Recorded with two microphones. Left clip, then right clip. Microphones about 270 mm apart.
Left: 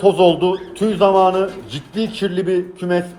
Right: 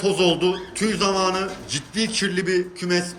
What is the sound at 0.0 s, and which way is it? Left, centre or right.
Speech, centre.